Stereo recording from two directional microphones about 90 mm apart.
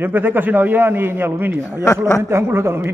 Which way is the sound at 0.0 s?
20° right (ahead or behind).